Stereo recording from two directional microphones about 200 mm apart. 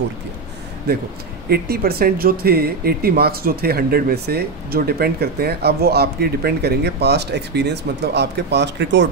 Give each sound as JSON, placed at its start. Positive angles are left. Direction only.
{"t": 0.9, "sound": "speech", "side_deg": -50}